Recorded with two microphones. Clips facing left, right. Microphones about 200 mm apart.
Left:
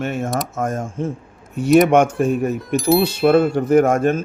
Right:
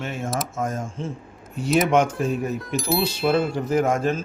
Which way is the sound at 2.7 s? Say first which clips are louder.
Left 8 dB; centre (ahead or behind).